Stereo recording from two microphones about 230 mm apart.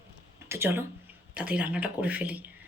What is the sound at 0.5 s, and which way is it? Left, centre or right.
Speech, centre.